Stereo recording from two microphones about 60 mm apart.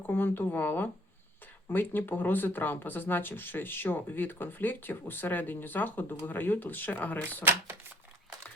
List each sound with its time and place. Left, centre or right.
0.0 s speech: left